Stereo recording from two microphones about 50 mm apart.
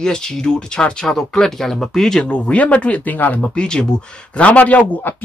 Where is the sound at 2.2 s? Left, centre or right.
Left.